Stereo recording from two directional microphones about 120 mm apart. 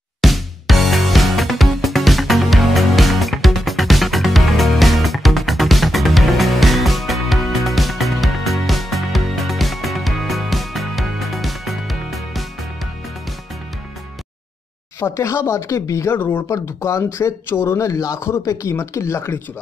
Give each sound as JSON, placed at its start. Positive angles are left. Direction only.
{"t": 0.2, "sound": "music", "side_deg": 0}
{"t": 15.0, "sound": "speech", "side_deg": 25}